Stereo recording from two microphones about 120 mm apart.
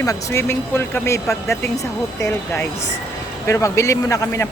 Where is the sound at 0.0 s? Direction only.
25° left (ahead or behind).